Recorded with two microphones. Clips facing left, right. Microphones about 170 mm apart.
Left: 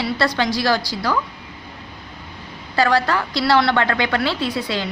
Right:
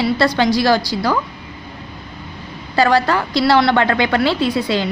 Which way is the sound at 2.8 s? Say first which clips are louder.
Right 3 dB; 30° right (ahead or behind).